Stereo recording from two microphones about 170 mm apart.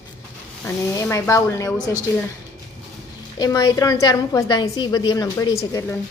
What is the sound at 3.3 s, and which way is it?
A woman's voice, 25° left (ahead or behind).